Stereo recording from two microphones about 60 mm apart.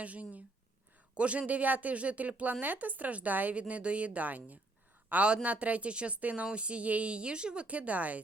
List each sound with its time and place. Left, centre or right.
0.0 s a woman's voice: right